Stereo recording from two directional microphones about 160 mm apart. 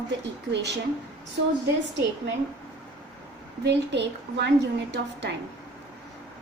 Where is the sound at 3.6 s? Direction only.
90° right.